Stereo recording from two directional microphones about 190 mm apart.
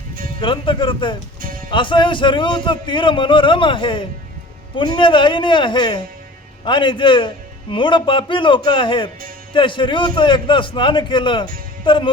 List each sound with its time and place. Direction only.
0.3 s a man's voice: 25° left (ahead or behind)
1.4 s music: 45° right (ahead or behind)
1.7 s a man's voice: 25° left (ahead or behind)